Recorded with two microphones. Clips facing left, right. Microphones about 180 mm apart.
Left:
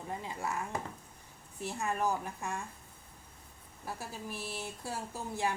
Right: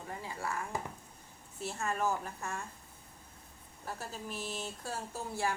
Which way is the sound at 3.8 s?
10° left (ahead or behind).